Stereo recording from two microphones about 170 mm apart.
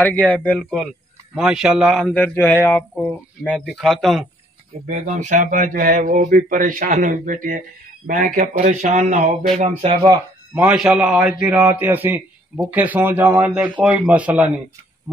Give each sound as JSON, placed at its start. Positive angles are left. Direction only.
{"t": 0.0, "sound": "speech", "side_deg": 10}
{"t": 0.6, "sound": "a man's voice", "side_deg": -5}
{"t": 2.0, "sound": "speech", "side_deg": 5}
{"t": 4.8, "sound": "speech", "side_deg": -45}
{"t": 10.5, "sound": "speech", "side_deg": -5}